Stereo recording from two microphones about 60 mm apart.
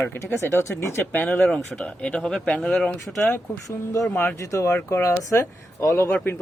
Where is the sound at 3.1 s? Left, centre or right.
Left.